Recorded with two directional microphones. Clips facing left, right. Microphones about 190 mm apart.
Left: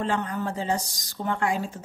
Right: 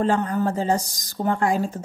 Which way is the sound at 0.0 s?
40° right (ahead or behind).